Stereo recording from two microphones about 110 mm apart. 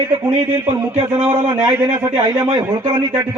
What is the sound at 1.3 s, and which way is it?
Speech, 35° right (ahead or behind).